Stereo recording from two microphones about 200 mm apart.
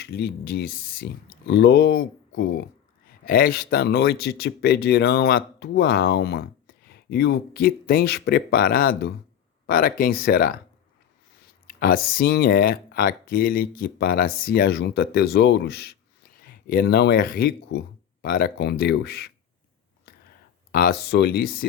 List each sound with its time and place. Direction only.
0.0 s speech: 55° left (ahead or behind)
11.7 s speech: 45° left (ahead or behind)
20.7 s speech: 50° left (ahead or behind)